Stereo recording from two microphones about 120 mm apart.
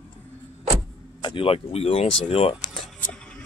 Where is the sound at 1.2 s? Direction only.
50° left (ahead or behind).